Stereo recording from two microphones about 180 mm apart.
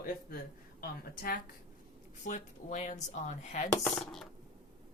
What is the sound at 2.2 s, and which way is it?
Speech, 45° left (ahead or behind).